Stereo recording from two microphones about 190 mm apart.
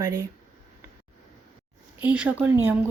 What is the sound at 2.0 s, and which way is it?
Speech, 5° right (ahead or behind).